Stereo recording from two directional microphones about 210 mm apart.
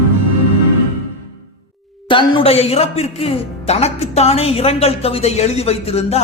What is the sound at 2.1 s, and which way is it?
A man's voice, 25° left (ahead or behind).